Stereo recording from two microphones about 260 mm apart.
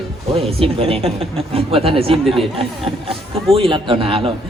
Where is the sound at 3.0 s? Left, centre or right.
Right.